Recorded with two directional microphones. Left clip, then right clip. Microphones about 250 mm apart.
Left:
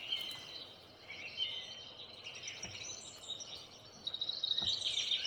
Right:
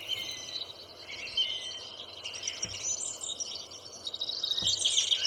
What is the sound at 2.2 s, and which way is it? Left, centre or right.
Chirp, right.